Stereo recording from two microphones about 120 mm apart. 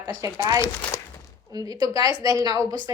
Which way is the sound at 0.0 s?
35° right (ahead or behind).